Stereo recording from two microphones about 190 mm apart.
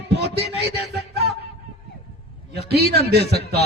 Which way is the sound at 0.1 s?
60° right (ahead or behind).